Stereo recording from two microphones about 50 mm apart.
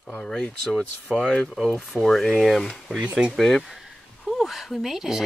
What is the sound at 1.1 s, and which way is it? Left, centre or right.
Speech, centre.